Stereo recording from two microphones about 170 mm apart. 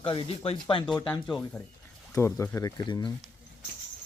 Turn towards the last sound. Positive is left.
turn(degrees=25)  # may be behind; listen again after turning